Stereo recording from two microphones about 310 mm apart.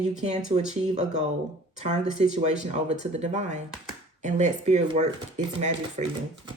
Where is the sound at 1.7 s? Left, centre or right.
Right.